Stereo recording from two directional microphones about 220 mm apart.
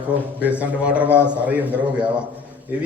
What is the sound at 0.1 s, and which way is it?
A man's voice, 5° right (ahead or behind).